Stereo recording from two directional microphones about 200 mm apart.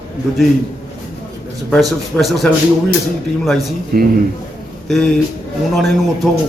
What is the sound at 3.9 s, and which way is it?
Speech, 45° right (ahead or behind).